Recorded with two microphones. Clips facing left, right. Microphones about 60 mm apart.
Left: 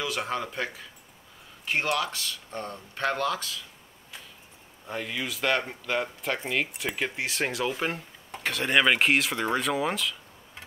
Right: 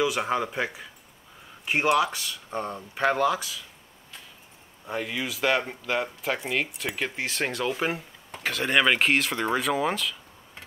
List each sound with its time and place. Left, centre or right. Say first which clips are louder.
0.0 s speech: right 5 dB; centre
4.8 s speech: right 2 dB; centre